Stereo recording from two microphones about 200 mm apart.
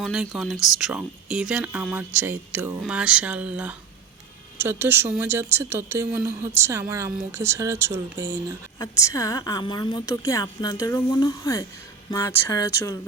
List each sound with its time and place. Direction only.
0.0 s speech: centre (ahead or behind)
8.8 s a woman's voice: 15° left (ahead or behind)